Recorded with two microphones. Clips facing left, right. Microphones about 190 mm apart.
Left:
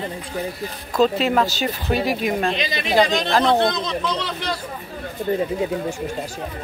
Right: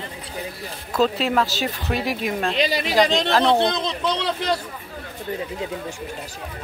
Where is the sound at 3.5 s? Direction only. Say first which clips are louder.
Left 1 dB; 25° right (ahead or behind).